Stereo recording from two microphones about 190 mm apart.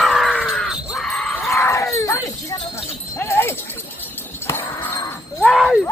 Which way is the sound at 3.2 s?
10° left (ahead or behind).